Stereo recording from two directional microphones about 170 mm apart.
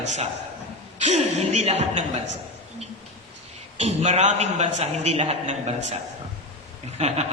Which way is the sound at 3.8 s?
40° right (ahead or behind).